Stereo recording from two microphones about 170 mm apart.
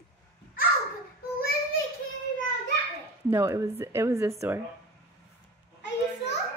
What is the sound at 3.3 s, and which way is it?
A woman's voice, 15° right (ahead or behind).